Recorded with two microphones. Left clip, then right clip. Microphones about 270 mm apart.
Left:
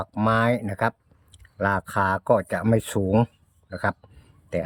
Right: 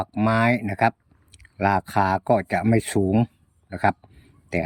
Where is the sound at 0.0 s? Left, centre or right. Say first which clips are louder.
Right 1 dB; centre.